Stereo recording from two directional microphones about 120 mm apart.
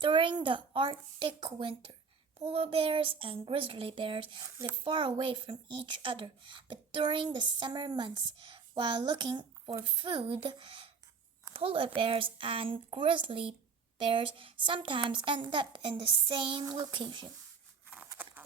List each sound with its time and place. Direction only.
0.0 s speech: 40° right (ahead or behind)
18.2 s clip-clop: 15° right (ahead or behind)